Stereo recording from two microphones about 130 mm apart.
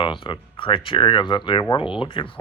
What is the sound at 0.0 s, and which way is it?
Speech, 40° left (ahead or behind).